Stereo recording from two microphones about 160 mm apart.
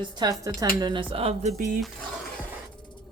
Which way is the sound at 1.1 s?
35° right (ahead or behind).